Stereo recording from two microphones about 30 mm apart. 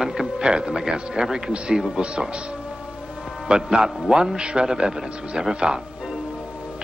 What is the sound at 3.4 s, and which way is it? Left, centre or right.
Speech, right.